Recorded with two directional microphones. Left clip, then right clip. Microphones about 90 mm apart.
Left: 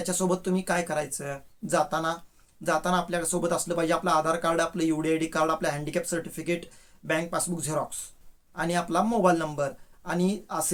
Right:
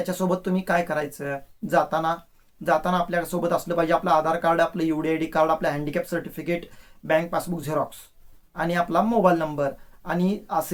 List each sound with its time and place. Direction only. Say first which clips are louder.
0.0 s speech: right 3 dB; 25° left (ahead or behind)